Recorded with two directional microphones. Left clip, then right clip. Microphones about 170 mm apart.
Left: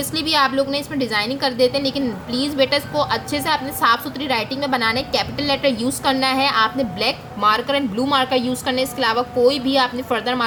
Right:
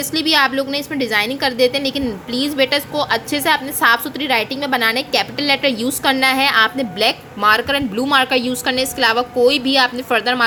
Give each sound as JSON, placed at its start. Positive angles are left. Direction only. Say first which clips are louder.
{"t": 0.1, "sound": "a woman's voice", "louder": "right 3 dB", "side_deg": -35}